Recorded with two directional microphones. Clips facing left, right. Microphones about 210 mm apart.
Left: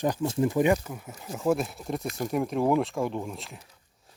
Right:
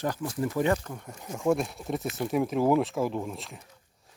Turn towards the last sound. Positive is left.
turn(degrees=0)  # may be behind; listen again after turning